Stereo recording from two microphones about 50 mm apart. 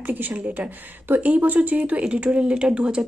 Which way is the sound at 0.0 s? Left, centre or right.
Right.